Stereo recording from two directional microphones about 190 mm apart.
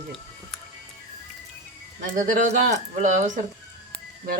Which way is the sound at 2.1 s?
45° right (ahead or behind).